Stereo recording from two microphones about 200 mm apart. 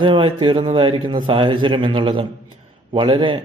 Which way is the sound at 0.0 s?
25° right (ahead or behind).